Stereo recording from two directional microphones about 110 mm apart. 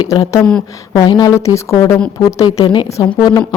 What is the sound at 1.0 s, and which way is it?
Speech, 35° left (ahead or behind).